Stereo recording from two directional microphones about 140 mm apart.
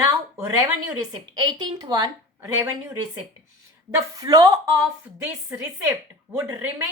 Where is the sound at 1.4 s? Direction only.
30° right (ahead or behind).